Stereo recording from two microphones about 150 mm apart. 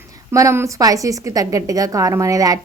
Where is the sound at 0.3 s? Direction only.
20° right (ahead or behind).